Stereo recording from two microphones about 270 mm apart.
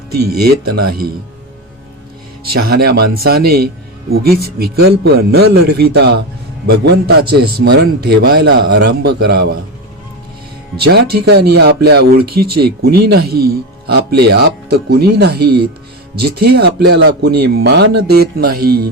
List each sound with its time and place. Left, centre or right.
0.3 s a man's voice: right
2.6 s a man's voice: right
10.8 s a man's voice: right